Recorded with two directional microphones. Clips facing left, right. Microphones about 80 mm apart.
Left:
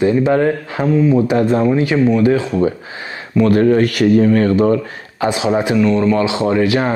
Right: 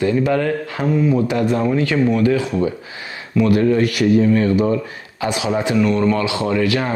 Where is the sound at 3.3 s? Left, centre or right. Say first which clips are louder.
Left 3 dB; left.